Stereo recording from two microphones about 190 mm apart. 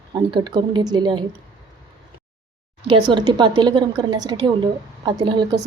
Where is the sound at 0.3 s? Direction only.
25° right (ahead or behind).